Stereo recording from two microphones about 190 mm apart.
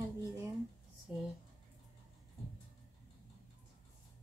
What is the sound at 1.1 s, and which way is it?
Speech, 5° right (ahead or behind).